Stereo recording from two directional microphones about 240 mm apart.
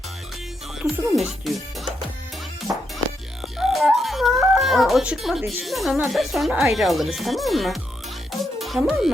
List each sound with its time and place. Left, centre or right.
0.8 s speech: centre
2.7 s music: centre
3.6 s speech: centre
8.3 s music: centre